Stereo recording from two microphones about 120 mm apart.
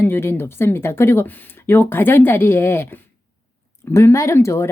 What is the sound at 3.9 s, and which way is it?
Speech, 25° left (ahead or behind).